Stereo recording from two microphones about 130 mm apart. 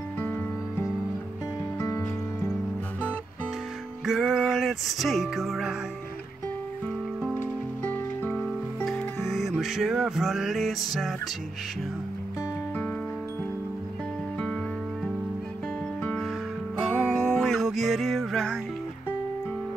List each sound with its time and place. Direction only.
0.2 s music: 15° left (ahead or behind)
4.0 s music: centre (ahead or behind)
7.3 s music: 15° left (ahead or behind)
16.0 s music: 5° left (ahead or behind)
16.8 s music: 5° right (ahead or behind)